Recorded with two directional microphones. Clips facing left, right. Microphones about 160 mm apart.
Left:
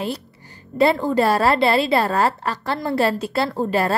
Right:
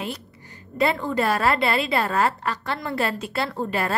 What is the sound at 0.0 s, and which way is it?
A woman's voice, 35° left (ahead or behind).